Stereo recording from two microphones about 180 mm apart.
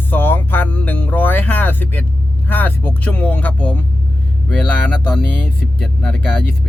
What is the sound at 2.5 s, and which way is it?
Speech, 10° left (ahead or behind).